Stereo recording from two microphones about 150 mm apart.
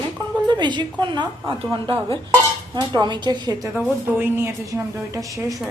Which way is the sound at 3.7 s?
5° right (ahead or behind).